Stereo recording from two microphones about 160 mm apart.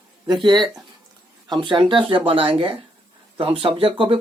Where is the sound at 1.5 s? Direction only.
30° right (ahead or behind).